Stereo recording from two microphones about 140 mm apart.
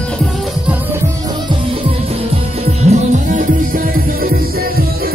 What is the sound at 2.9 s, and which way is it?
Music, 60° right (ahead or behind).